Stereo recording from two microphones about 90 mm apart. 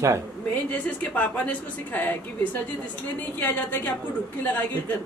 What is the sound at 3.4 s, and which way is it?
Speech, 20° left (ahead or behind).